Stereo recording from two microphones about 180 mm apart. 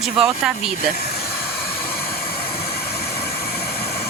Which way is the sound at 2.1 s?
55° left (ahead or behind).